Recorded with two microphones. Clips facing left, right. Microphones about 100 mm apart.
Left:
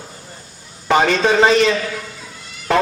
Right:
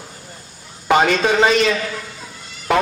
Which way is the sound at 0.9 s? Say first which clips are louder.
Even; 15° right (ahead or behind).